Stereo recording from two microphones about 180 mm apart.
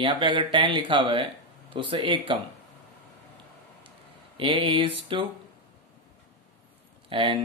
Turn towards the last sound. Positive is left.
turn(degrees=-30)  # may be behind; listen again after turning